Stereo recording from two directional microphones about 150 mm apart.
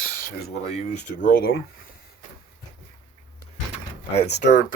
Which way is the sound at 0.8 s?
70° left (ahead or behind).